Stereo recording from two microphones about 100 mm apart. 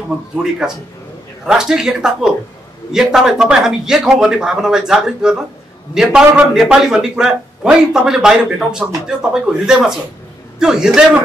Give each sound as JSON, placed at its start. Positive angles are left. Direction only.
{"t": 0.4, "sound": "a man's voice", "side_deg": -5}